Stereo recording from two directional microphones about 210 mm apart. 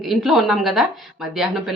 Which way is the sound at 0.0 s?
Centre (ahead or behind).